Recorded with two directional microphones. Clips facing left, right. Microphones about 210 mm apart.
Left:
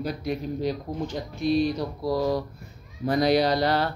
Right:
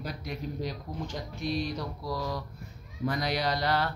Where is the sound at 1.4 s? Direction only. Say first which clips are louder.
Left 9 dB; 30° left (ahead or behind).